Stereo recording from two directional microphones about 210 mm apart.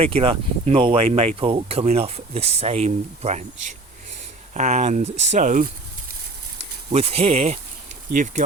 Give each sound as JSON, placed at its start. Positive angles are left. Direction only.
{"t": 0.0, "sound": "speech", "side_deg": -25}
{"t": 6.9, "sound": "speech", "side_deg": -30}